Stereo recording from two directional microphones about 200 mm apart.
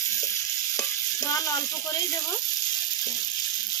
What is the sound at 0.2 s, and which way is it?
Stir, 15° left (ahead or behind).